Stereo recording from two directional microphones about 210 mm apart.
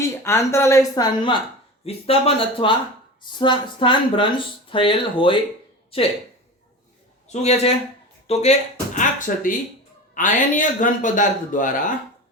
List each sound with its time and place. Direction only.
0.0 s speech: 15° left (ahead or behind)
7.4 s speech: 30° left (ahead or behind)